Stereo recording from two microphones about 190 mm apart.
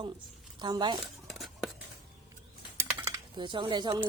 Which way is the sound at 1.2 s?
Centre (ahead or behind).